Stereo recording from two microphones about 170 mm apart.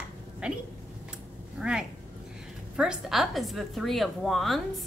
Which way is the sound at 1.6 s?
5° right (ahead or behind).